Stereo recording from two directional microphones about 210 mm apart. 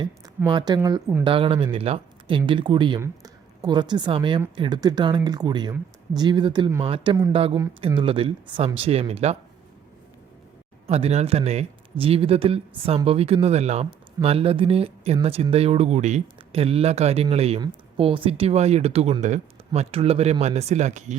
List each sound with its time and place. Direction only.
0.4 s speech: 20° right (ahead or behind)
10.8 s speech: 30° right (ahead or behind)